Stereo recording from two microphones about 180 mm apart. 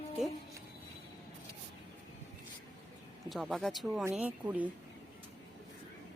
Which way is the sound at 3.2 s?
Centre (ahead or behind).